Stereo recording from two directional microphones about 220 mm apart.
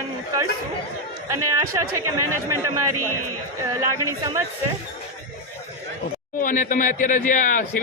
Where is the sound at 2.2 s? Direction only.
90° right.